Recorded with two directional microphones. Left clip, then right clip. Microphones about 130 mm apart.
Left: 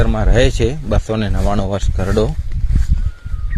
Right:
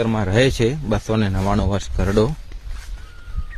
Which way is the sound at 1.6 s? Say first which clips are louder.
Left 3 dB; centre (ahead or behind).